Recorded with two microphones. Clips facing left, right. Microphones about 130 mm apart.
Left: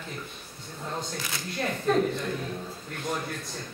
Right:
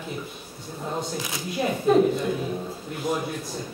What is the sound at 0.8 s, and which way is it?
A man's voice, 10° right (ahead or behind).